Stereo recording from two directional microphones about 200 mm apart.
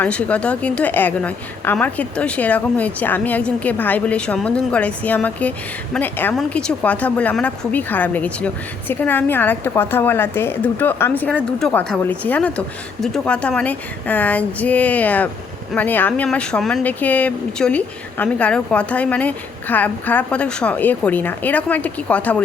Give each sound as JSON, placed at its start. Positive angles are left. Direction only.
{"t": 0.0, "sound": "a woman's voice", "side_deg": 5}